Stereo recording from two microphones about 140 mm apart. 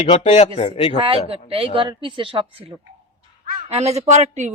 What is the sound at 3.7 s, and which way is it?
Speech, 50° right (ahead or behind).